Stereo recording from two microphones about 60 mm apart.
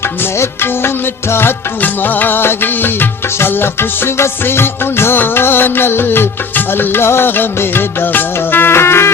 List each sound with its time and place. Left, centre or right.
0.6 s music: left